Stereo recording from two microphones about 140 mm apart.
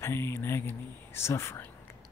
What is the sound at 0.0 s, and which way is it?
Speech, 20° left (ahead or behind).